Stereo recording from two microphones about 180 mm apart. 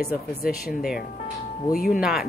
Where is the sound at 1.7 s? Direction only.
50° left (ahead or behind).